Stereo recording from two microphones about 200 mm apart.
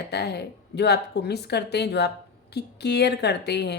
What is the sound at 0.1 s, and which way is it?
A woman's voice, 55° left (ahead or behind).